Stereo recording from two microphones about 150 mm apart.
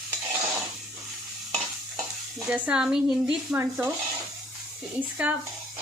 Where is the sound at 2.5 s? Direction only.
5° right (ahead or behind).